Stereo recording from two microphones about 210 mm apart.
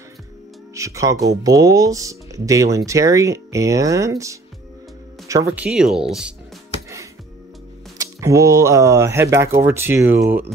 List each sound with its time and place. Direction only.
0.7 s speech: 15° right (ahead or behind)
8.0 s speech: 15° right (ahead or behind)